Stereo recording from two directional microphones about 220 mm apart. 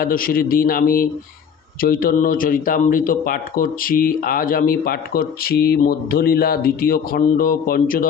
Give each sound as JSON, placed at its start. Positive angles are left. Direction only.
{"t": 0.0, "sound": "speech", "side_deg": 40}